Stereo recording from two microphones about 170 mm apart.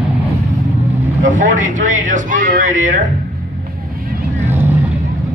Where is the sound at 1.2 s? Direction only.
50° right (ahead or behind).